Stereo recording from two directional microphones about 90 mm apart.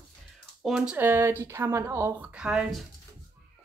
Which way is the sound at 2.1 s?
10° right (ahead or behind).